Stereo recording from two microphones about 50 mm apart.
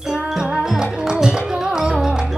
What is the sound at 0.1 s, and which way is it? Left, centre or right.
Music, centre.